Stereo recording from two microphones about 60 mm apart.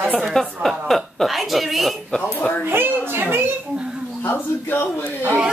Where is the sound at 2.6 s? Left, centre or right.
Right.